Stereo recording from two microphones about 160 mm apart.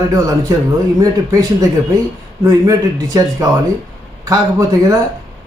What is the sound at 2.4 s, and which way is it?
Speech, 20° right (ahead or behind).